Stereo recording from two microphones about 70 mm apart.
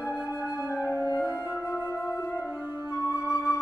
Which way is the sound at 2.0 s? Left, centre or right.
Left.